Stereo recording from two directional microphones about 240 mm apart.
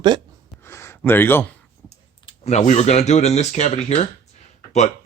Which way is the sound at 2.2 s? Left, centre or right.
Left.